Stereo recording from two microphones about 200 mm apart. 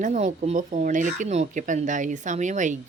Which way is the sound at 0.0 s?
35° right (ahead or behind).